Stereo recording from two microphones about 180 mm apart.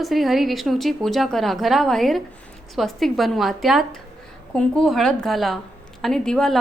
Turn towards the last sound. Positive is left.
turn(degrees=5)  # may be behind; listen again after turning